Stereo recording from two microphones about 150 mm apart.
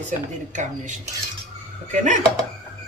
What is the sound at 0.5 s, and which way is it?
Speech, 55° right (ahead or behind).